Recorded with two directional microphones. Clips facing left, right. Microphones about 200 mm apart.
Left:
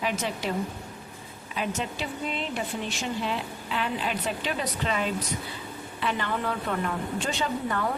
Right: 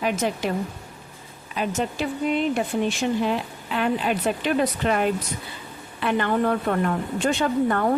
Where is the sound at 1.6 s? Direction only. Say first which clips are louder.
Right 5 dB; 45° right (ahead or behind).